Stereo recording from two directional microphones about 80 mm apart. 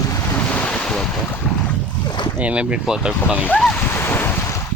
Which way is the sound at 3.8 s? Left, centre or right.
Left.